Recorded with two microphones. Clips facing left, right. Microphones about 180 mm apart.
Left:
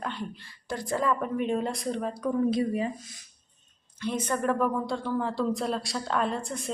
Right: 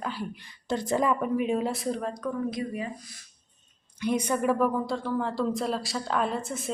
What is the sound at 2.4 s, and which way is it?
Speech, 30° left (ahead or behind).